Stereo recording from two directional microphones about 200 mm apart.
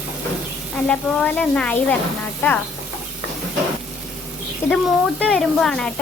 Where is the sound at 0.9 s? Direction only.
5° left (ahead or behind).